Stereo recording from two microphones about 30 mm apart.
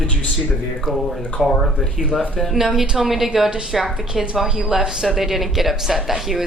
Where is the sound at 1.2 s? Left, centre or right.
Left.